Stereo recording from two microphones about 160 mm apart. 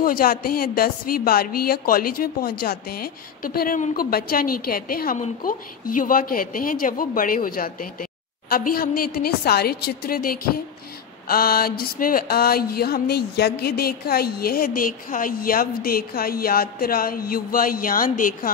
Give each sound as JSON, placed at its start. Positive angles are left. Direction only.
{"t": 0.0, "sound": "speech", "side_deg": 65}